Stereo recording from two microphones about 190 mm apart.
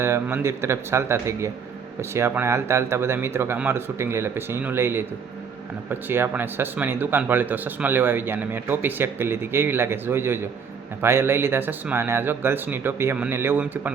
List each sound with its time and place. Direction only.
0.0 s speech: 15° right (ahead or behind)